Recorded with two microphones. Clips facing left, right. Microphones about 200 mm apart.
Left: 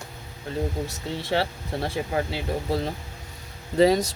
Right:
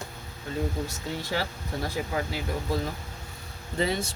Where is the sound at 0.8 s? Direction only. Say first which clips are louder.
Left 2 dB; 30° left (ahead or behind).